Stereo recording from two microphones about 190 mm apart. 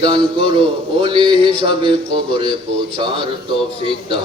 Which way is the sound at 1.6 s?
30° right (ahead or behind).